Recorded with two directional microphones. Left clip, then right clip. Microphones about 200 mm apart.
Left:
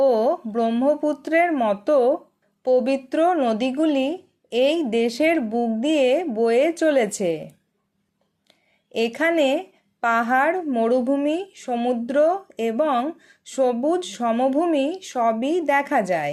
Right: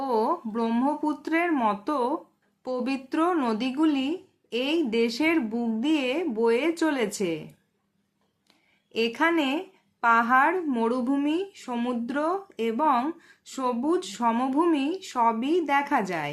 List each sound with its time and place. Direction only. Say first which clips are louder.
0.0 s speech: left 7 dB; 20° left (ahead or behind)
8.4 s a sound: left 7 dB; 20° left (ahead or behind)
10.0 s speech: left 1 dB; 20° left (ahead or behind)